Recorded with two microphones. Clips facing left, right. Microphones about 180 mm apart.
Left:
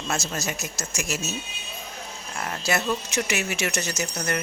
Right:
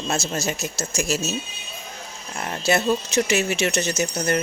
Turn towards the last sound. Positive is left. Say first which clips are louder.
# right 6 dB
turn(degrees=-30)  # may be behind; listen again after turning